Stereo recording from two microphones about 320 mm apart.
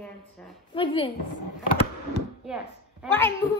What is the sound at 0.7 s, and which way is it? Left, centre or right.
Speech, centre.